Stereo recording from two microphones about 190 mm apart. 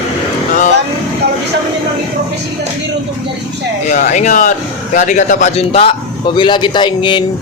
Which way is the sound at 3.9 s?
40° left (ahead or behind).